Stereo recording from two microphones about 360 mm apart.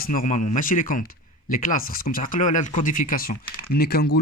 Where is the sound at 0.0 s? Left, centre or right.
Left.